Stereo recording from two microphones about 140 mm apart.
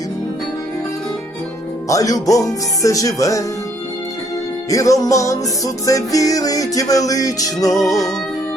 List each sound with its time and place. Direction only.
1.9 s music: 25° left (ahead or behind)
4.7 s music: 25° left (ahead or behind)